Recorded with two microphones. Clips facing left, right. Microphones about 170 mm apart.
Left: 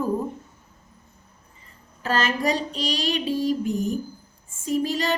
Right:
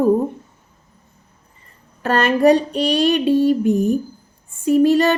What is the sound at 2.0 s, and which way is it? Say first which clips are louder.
A woman's voice: right 10 dB; 60° right (ahead or behind).